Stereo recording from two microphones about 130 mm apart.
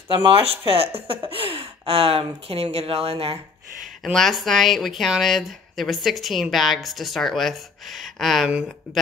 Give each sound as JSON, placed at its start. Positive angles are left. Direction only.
{"t": 0.3, "sound": "speech", "side_deg": -50}
{"t": 4.0, "sound": "speech", "side_deg": 0}